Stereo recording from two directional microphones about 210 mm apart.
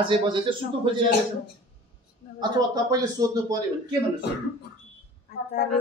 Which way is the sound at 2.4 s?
20° right (ahead or behind).